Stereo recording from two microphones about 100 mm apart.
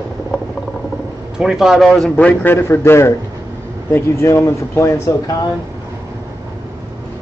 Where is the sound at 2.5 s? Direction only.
25° left (ahead or behind).